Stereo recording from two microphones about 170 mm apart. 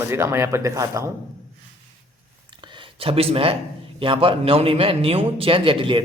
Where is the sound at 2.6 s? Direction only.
30° right (ahead or behind).